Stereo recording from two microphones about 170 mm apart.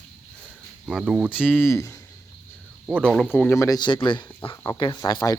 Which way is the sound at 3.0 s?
Centre (ahead or behind).